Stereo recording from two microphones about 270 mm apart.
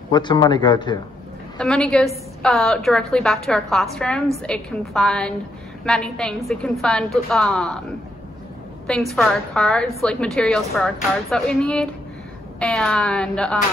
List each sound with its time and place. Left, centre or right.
0.1 s speech: centre
1.6 s a woman's voice: centre
8.8 s a woman's voice: centre